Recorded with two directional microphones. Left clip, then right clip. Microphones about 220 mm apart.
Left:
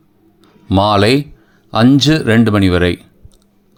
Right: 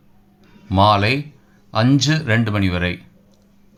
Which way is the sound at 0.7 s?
40° left (ahead or behind).